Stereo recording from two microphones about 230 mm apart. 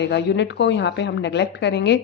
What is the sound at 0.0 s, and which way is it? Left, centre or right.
A woman's voice, left.